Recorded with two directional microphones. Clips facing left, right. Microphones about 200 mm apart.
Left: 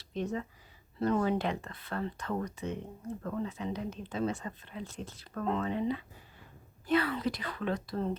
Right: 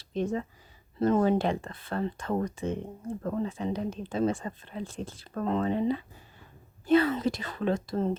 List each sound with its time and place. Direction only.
0.0 s speech: 30° right (ahead or behind)